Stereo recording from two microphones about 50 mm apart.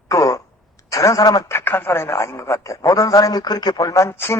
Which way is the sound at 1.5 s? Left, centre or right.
Left.